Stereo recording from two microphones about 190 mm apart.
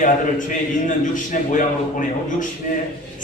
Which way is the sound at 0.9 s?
40° left (ahead or behind).